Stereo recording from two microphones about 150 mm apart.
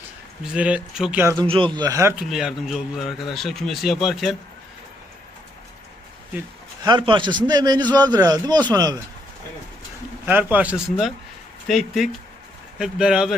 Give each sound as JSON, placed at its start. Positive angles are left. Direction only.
{"t": 0.5, "sound": "speech", "side_deg": -10}
{"t": 1.2, "sound": "a man's voice", "side_deg": -20}
{"t": 1.5, "sound": "a man's voice", "side_deg": -35}
{"t": 2.1, "sound": "a man's voice", "side_deg": -5}
{"t": 6.8, "sound": "a man's voice", "side_deg": -30}
{"t": 10.2, "sound": "a man's voice", "side_deg": -10}